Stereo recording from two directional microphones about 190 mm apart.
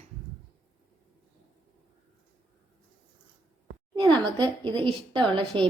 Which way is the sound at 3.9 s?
25° right (ahead or behind).